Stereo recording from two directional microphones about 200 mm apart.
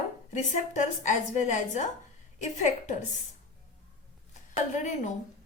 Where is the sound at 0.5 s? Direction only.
35° left (ahead or behind).